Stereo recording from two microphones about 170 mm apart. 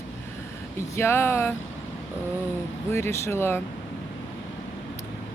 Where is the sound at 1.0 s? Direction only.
15° left (ahead or behind).